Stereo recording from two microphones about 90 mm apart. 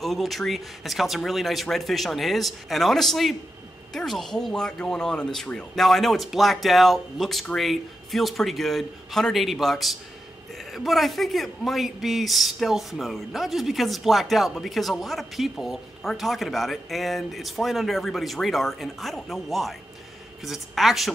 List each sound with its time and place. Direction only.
0.0 s a man's voice: centre (ahead or behind)